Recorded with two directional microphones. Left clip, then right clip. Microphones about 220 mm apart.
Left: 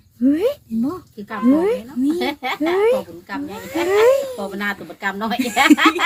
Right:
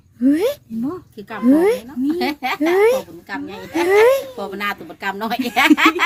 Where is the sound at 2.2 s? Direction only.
60° right (ahead or behind).